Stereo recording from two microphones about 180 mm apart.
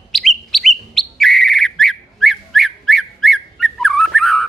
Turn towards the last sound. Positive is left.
turn(degrees=0)  # may be behind; listen again after turning